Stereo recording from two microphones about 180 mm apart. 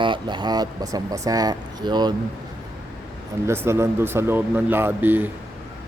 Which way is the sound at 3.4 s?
15° right (ahead or behind).